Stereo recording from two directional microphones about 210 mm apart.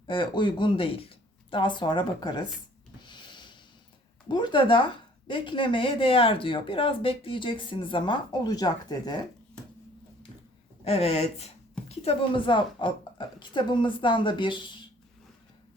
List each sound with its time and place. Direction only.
0.1 s speech: 25° left (ahead or behind)
3.0 s a sound: 20° left (ahead or behind)
4.3 s speech: 20° left (ahead or behind)
10.8 s speech: 30° left (ahead or behind)